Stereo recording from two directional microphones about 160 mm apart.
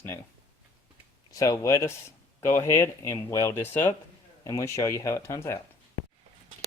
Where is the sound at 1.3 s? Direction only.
20° left (ahead or behind).